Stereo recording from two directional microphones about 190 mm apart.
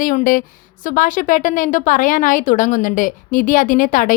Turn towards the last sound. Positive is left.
turn(degrees=45)  # may be behind; listen again after turning